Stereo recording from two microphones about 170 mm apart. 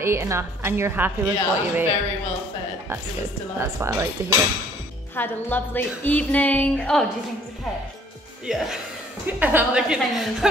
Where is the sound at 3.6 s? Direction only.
15° right (ahead or behind).